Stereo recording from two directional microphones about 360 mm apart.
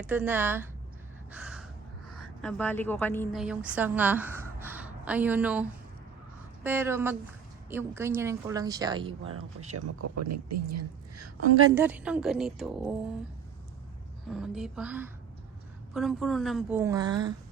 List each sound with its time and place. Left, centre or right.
0.0 s a woman's voice: centre
1.3 s gasp: centre
2.4 s a woman's voice: centre
9.7 s a woman's voice: right
11.7 s a woman's voice: centre
14.3 s a woman's voice: centre